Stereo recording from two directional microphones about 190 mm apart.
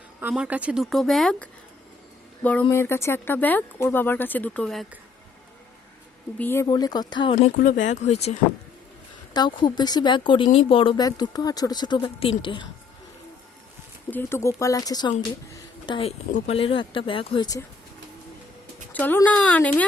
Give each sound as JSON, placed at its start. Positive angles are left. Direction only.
{"t": 0.2, "sound": "speech", "side_deg": -10}
{"t": 6.4, "sound": "speech", "side_deg": 15}
{"t": 7.5, "sound": "speech", "side_deg": 45}
{"t": 9.3, "sound": "speech", "side_deg": 20}
{"t": 14.1, "sound": "speech", "side_deg": 10}
{"t": 18.9, "sound": "speech", "side_deg": 10}